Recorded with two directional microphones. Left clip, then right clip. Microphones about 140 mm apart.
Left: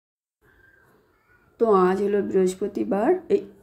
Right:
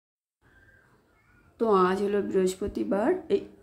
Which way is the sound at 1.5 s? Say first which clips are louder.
Left 4 dB; 15° left (ahead or behind).